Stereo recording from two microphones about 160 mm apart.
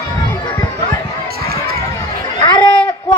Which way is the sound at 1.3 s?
75° right (ahead or behind).